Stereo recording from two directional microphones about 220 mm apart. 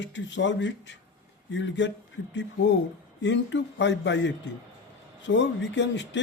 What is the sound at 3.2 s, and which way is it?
Speech, 55° left (ahead or behind).